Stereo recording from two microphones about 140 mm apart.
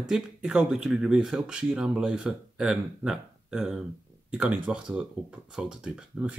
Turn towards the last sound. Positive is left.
turn(degrees=-5)  # may be behind; listen again after turning